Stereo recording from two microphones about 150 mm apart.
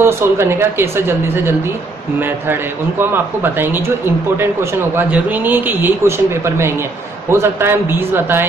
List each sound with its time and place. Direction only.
0.0 s speech: 15° right (ahead or behind)
3.5 s speech: 15° right (ahead or behind)